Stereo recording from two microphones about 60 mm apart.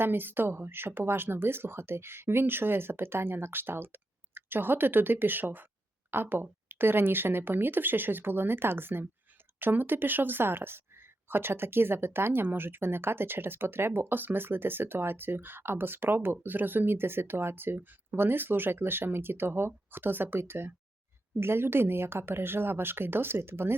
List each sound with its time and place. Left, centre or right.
0.0 s speech: right